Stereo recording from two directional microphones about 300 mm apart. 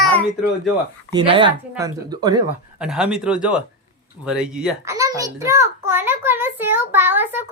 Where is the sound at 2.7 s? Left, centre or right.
Centre.